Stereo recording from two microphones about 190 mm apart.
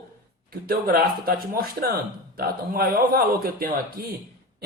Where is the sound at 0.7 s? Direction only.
50° right (ahead or behind).